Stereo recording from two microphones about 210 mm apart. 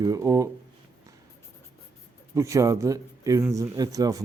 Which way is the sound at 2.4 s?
15° right (ahead or behind).